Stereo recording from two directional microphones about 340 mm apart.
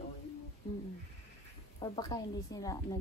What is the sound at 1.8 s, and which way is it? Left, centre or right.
Speech, centre.